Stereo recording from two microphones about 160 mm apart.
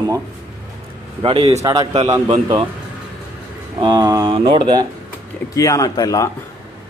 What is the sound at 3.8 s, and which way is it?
Speech, 25° right (ahead or behind).